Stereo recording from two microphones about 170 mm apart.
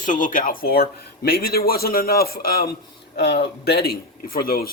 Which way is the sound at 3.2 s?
75° left (ahead or behind).